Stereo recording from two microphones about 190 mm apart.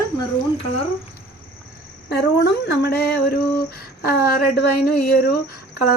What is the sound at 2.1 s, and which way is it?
Speech, 60° left (ahead or behind).